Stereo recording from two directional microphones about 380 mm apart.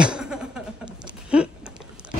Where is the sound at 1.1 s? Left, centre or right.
Centre.